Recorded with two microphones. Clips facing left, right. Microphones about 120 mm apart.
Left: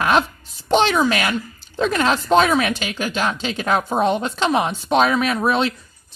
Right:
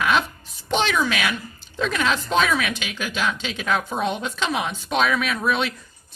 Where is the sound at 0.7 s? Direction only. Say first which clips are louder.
Left 5 dB; 40° left (ahead or behind).